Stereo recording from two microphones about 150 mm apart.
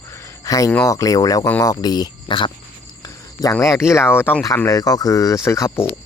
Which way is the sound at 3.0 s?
25° left (ahead or behind).